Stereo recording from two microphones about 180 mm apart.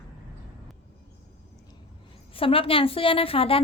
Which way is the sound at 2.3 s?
30° left (ahead or behind).